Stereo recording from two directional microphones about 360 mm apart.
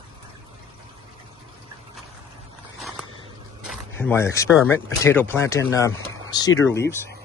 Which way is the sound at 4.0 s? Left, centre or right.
Centre.